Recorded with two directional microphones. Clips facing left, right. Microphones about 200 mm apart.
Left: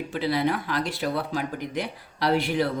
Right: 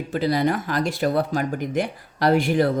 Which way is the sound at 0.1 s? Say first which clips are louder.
Right 4 dB; 40° right (ahead or behind).